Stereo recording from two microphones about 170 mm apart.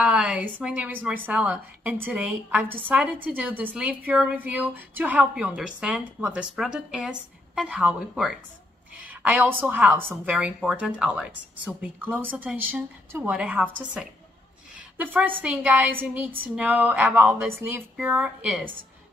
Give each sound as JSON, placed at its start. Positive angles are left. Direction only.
{"t": 0.0, "sound": "a woman's voice", "side_deg": -5}